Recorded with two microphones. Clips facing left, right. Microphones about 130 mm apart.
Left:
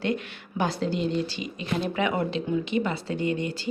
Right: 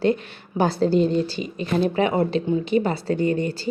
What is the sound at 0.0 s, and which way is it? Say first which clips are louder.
A woman's voice: right 7 dB; 35° right (ahead or behind).